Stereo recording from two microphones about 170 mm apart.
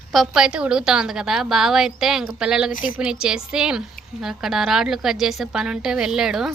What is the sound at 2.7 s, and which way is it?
Speech, 50° left (ahead or behind).